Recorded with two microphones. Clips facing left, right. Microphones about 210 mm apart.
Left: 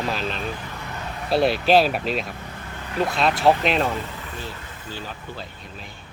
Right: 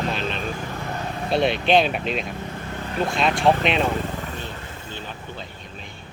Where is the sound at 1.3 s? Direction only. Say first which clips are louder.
Left 1 dB; 5° left (ahead or behind).